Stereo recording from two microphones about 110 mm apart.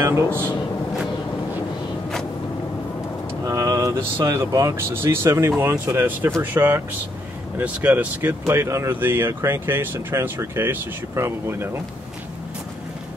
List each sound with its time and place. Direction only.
0.3 s a man's voice: 15° left (ahead or behind)
3.4 s speech: 30° right (ahead or behind)